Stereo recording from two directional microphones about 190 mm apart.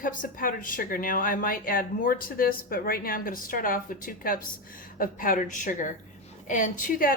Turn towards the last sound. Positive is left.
turn(degrees=45)  # may be behind; listen again after turning